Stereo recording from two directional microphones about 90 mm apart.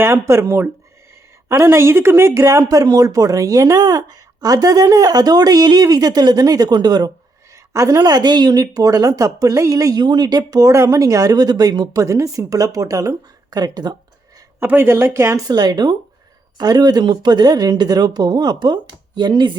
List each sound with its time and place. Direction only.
0.0 s a woman's voice: 30° right (ahead or behind); by 7.1 s 50° right (ahead or behind)
7.5 s a woman's voice: 35° right (ahead or behind)
14.6 s a woman's voice: 25° right (ahead or behind)
15.4 s speech: 50° right (ahead or behind)